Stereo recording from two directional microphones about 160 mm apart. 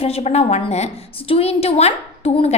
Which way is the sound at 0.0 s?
40° left (ahead or behind).